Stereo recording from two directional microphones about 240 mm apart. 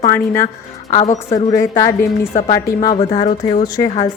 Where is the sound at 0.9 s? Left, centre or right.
Left.